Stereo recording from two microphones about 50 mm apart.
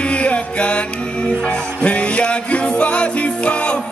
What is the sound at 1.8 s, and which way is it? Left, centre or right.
Music, left.